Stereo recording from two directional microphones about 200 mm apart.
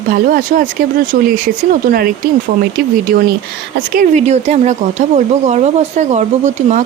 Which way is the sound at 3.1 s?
50° right (ahead or behind).